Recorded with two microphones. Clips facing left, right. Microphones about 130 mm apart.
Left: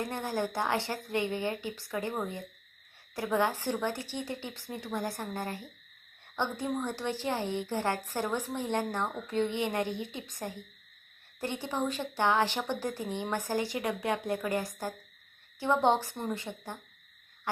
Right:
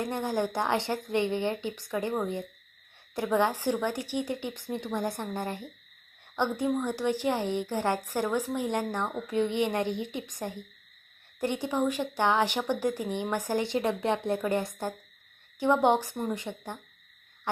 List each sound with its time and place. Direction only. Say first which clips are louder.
0.0 s a woman's voice: right 3 dB; 20° right (ahead or behind)